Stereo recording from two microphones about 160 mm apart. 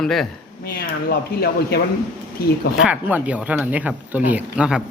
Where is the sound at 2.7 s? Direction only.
5° right (ahead or behind).